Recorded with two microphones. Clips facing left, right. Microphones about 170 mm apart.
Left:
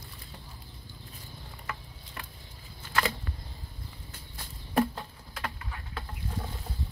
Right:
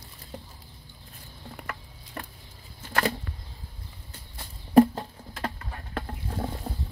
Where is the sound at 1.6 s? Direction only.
75° right (ahead or behind).